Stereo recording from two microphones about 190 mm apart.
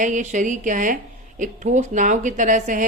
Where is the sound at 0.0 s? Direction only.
40° right (ahead or behind).